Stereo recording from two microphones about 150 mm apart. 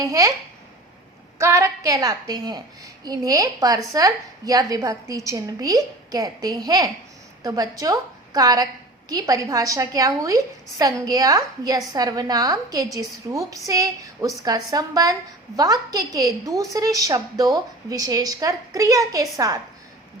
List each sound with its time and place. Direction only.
0.0 s a woman's voice: 20° right (ahead or behind)
1.4 s a woman's voice: 20° right (ahead or behind)